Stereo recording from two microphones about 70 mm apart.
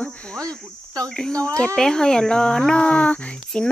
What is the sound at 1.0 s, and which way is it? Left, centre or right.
Speech, centre.